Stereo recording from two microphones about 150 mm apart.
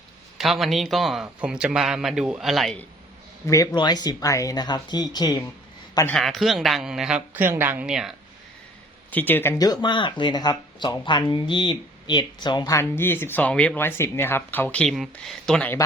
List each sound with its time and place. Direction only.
0.3 s a man's voice: centre (ahead or behind)
3.4 s speech: 20° left (ahead or behind)
6.1 s a man's voice: centre (ahead or behind)
9.1 s speech: 15° left (ahead or behind)
9.8 s speech: 30° left (ahead or behind); by 15.7 s 5° left (ahead or behind)